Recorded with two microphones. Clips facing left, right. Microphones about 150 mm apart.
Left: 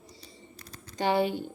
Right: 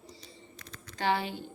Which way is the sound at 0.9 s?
15° left (ahead or behind).